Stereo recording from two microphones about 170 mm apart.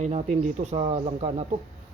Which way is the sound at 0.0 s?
40° right (ahead or behind).